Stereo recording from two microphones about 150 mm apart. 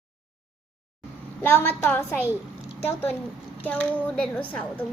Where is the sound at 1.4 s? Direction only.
15° left (ahead or behind).